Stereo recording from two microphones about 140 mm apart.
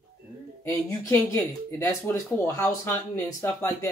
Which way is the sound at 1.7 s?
20° left (ahead or behind).